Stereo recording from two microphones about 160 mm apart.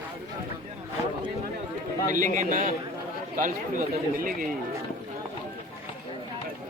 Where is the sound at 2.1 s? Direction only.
50° right (ahead or behind).